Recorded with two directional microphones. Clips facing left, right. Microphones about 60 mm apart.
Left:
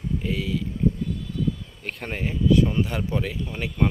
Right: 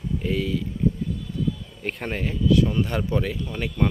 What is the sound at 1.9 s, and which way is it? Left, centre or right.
Speech, centre.